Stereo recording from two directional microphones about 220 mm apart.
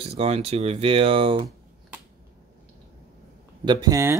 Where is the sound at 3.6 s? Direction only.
20° right (ahead or behind).